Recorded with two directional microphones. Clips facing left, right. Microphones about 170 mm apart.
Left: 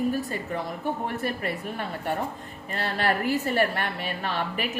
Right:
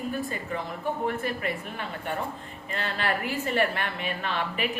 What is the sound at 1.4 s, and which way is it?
A woman's voice, 40° left (ahead or behind).